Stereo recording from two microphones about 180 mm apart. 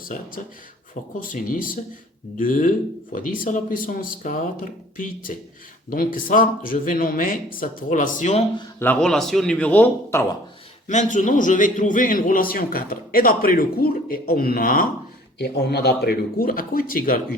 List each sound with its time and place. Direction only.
0.0 s a man's voice: 50° left (ahead or behind)
8.8 s a man's voice: 5° left (ahead or behind)
10.8 s a man's voice: 45° left (ahead or behind)
15.4 s speech: 65° left (ahead or behind)